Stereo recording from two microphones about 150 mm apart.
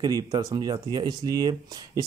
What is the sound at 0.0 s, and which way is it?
Speech, 25° right (ahead or behind).